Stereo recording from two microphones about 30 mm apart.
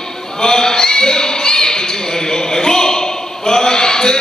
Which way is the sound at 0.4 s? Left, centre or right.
Left.